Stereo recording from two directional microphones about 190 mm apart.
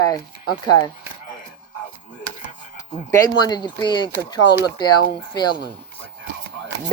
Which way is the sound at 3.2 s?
20° left (ahead or behind).